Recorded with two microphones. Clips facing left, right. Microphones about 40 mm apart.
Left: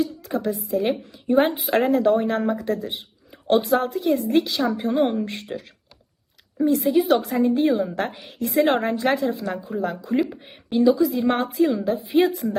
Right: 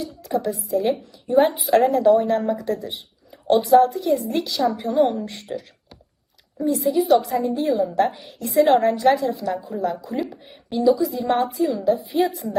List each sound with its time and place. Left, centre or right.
0.0 s a woman's voice: left
7.4 s a woman's voice: left
7.7 s a woman's voice: left